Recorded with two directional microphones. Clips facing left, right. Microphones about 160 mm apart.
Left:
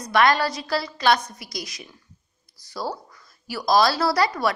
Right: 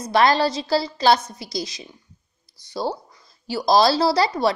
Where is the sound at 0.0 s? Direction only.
30° right (ahead or behind).